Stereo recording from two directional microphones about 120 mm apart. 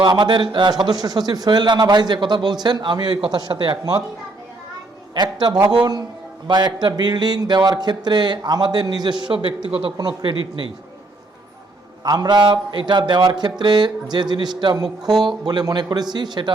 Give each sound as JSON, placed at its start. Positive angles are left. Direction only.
{"t": 0.0, "sound": "speech", "side_deg": -40}
{"t": 5.1, "sound": "speech", "side_deg": -35}
{"t": 12.0, "sound": "speech", "side_deg": -35}